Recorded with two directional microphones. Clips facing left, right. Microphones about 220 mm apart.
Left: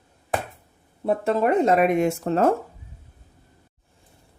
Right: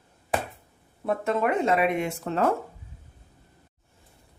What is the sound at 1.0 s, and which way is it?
Speech, 30° left (ahead or behind).